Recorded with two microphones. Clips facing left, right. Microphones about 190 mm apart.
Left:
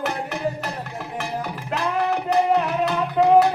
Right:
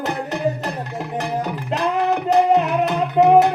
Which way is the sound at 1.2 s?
20° right (ahead or behind).